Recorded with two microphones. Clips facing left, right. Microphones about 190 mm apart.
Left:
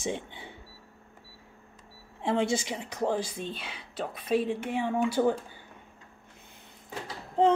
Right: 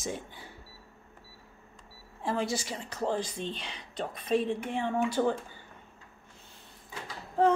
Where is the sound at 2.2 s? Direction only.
25° left (ahead or behind).